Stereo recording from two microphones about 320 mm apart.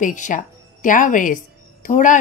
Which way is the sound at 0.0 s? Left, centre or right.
Left.